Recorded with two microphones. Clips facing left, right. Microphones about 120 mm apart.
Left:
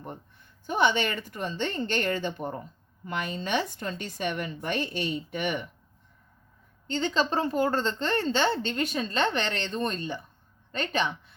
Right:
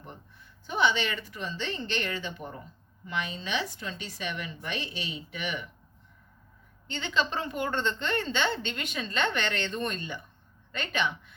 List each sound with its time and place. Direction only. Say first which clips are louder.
0.7 s a woman's voice: left 2 dB; 50° left (ahead or behind)
6.8 s a woman's voice: left 3 dB; 40° left (ahead or behind)